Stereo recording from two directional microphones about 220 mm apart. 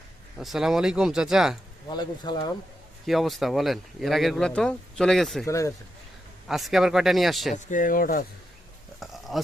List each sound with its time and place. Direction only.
0.3 s speech: centre (ahead or behind)
1.9 s speech: 20° left (ahead or behind)
3.1 s speech: centre (ahead or behind)
5.5 s speech: 15° left (ahead or behind)
6.5 s speech: centre (ahead or behind)
7.5 s speech: 35° left (ahead or behind)
9.0 s a sound: centre (ahead or behind)